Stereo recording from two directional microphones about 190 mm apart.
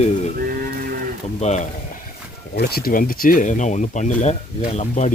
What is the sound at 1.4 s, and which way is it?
Speech, 35° left (ahead or behind).